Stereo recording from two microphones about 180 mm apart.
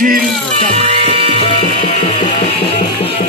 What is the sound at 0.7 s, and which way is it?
Music, 35° right (ahead or behind).